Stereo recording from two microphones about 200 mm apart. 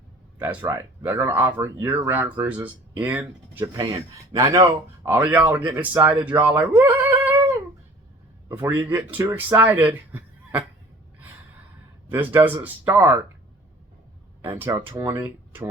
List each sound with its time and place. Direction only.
0.3 s speech: 10° right (ahead or behind)
3.6 s speech: 25° right (ahead or behind)
8.4 s speech: 10° right (ahead or behind)
12.1 s speech: 10° right (ahead or behind)
14.4 s speech: 15° right (ahead or behind)